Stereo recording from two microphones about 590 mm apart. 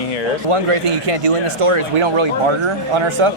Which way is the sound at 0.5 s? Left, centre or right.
Right.